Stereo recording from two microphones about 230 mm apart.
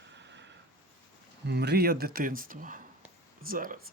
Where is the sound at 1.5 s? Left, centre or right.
Right.